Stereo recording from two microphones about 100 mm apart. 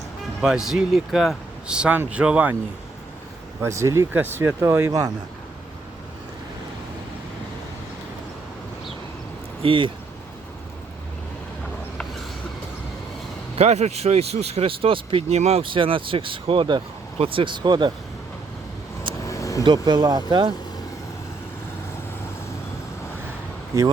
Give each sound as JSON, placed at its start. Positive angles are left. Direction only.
{"t": 0.4, "sound": "speech", "side_deg": -5}
{"t": 3.6, "sound": "speech", "side_deg": -30}
{"t": 4.9, "sound": "speech", "side_deg": -35}
{"t": 9.6, "sound": "speech", "side_deg": -55}
{"t": 13.6, "sound": "speech", "side_deg": -90}
{"t": 17.2, "sound": "speech", "side_deg": -65}
{"t": 19.2, "sound": "vehicle", "side_deg": 35}
{"t": 19.6, "sound": "speech", "side_deg": -45}